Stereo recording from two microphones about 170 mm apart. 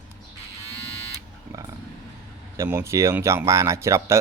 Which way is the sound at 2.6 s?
15° right (ahead or behind).